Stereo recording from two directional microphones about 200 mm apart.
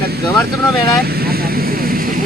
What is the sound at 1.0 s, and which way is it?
Vehicle, 50° right (ahead or behind).